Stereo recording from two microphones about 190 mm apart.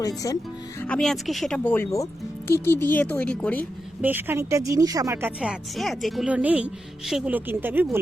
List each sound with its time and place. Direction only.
0.2 s speech: 20° left (ahead or behind)
0.8 s speech: 5° left (ahead or behind)
4.0 s speech: 10° right (ahead or behind)